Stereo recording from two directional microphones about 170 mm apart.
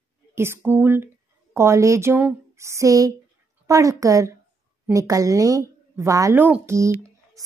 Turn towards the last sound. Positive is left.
turn(degrees=-15)  # may be behind; listen again after turning